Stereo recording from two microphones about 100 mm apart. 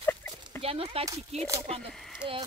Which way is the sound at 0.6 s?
75° right (ahead or behind).